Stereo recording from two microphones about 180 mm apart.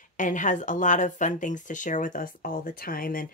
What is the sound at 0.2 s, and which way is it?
Speech, 45° left (ahead or behind).